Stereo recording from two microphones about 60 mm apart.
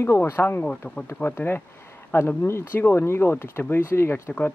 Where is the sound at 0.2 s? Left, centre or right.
Left.